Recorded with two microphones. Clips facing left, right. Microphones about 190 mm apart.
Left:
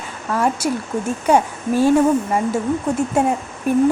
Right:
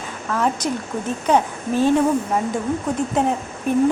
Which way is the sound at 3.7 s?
10° left (ahead or behind).